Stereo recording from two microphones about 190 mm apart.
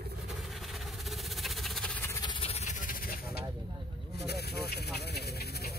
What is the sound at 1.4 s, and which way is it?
Vehicle, centre (ahead or behind).